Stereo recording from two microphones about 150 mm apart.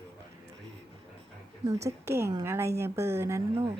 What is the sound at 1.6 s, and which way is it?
A woman's voice, 20° right (ahead or behind).